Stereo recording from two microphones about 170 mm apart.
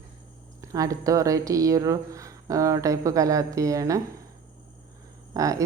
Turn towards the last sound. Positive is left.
turn(degrees=-20)  # may be behind; listen again after turning